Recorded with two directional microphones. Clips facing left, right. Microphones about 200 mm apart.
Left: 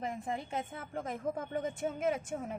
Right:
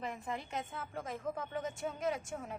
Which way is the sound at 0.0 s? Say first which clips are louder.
Left 3 dB; 45° left (ahead or behind).